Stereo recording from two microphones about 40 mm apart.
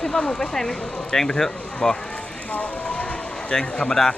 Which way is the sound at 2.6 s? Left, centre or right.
Left.